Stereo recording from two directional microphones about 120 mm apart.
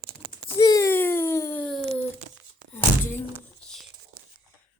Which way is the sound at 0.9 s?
20° left (ahead or behind).